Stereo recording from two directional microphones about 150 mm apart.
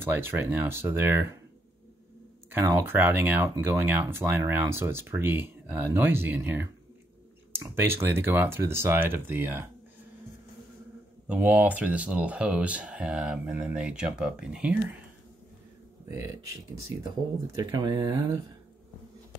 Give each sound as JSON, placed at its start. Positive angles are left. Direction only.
{"t": 0.0, "sound": "speech", "side_deg": -15}
{"t": 2.5, "sound": "speech", "side_deg": -15}
{"t": 11.2, "sound": "speech", "side_deg": -10}
{"t": 16.9, "sound": "speech", "side_deg": -20}